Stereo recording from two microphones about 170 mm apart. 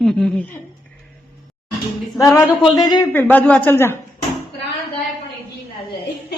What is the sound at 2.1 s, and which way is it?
Music, 20° left (ahead or behind).